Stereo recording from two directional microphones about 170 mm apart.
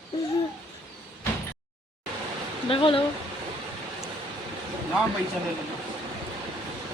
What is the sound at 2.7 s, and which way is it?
Speech, 30° left (ahead or behind).